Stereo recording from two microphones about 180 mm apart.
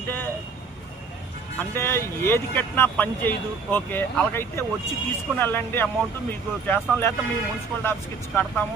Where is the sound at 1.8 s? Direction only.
15° left (ahead or behind).